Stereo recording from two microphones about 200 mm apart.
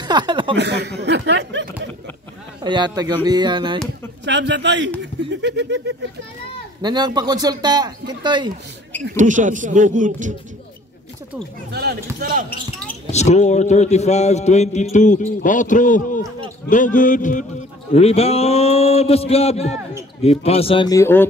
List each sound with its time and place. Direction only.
0.0 s speech: 20° right (ahead or behind)
0.6 s speech: 60° right (ahead or behind)
2.6 s speech: 20° right (ahead or behind)
4.2 s speech: 60° right (ahead or behind)
6.8 s speech: 20° right (ahead or behind)
9.1 s speech: 40° right (ahead or behind)
11.7 s speech: 55° right (ahead or behind)
13.0 s a man's voice: 35° left (ahead or behind); by 21.3 s 10° left (ahead or behind)